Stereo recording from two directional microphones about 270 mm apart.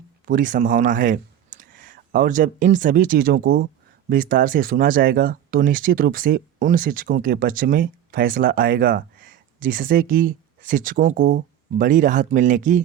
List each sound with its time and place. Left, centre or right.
0.3 s speech: right